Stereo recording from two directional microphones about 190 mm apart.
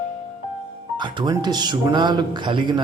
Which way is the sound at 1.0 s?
20° right (ahead or behind).